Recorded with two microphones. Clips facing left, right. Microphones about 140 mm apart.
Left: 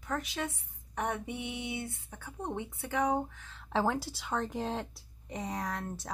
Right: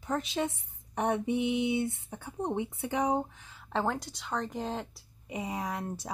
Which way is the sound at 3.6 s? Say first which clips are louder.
Left 1 dB; centre (ahead or behind).